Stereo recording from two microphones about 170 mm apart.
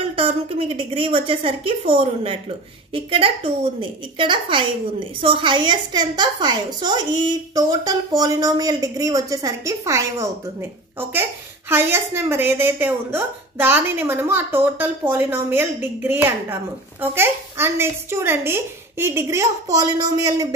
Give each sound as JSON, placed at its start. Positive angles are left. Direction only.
{"t": 0.1, "sound": "a woman's voice", "side_deg": -30}